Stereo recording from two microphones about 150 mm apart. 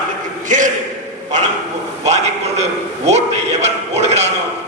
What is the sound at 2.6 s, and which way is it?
Speech, 45° right (ahead or behind).